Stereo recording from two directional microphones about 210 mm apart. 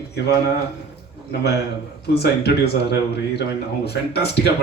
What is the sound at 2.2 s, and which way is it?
Speech, 50° left (ahead or behind).